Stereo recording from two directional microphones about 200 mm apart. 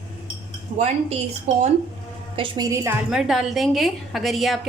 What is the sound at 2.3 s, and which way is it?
A woman's voice, 20° right (ahead or behind).